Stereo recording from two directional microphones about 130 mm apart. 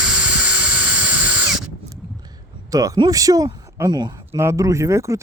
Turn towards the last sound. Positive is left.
turn(degrees=-25)  # may be behind; listen again after turning